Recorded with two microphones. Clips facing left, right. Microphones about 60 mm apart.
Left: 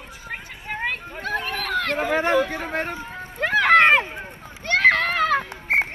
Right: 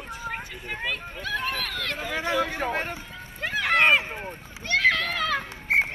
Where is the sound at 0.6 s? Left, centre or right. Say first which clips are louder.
Left 5 dB; left.